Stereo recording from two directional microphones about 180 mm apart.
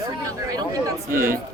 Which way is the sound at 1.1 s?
50° right (ahead or behind).